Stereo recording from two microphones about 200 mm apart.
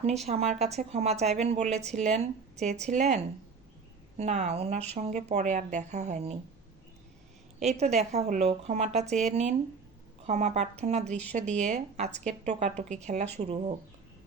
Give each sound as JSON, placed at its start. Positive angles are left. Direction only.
{"t": 0.3, "sound": "a woman's voice", "side_deg": -30}
{"t": 7.6, "sound": "a woman's voice", "side_deg": -35}